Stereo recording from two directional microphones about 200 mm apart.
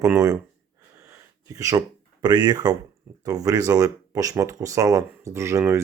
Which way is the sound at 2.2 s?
20° right (ahead or behind).